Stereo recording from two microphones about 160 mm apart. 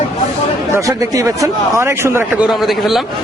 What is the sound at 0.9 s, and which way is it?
A man's voice, 20° right (ahead or behind).